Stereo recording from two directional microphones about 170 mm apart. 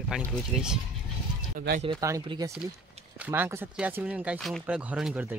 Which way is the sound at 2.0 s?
20° right (ahead or behind).